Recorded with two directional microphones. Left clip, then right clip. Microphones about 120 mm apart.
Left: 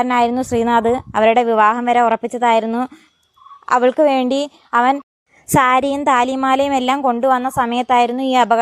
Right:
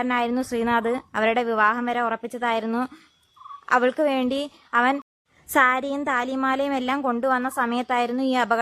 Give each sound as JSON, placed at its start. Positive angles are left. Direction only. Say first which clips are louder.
{"t": 0.0, "sound": "a woman's voice", "louder": "left 8 dB", "side_deg": 45}
{"t": 2.6, "sound": "a woman's voice", "louder": "left 6 dB", "side_deg": 35}
{"t": 5.5, "sound": "a woman's voice", "louder": "left 6 dB", "side_deg": 55}
{"t": 7.0, "sound": "a woman's voice", "louder": "left 8 dB", "side_deg": 30}